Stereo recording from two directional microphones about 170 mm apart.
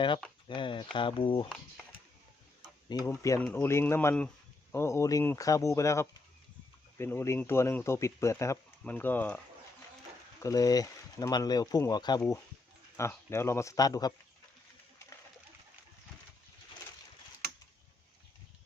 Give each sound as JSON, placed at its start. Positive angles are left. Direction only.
{"t": 0.4, "sound": "speech", "side_deg": 30}
{"t": 1.5, "sound": "speech", "side_deg": 5}
{"t": 3.1, "sound": "speech", "side_deg": 20}
{"t": 10.4, "sound": "speech", "side_deg": 20}